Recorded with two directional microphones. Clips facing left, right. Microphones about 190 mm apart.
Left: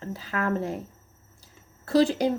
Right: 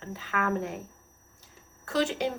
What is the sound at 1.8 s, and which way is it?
Speech, 35° left (ahead or behind).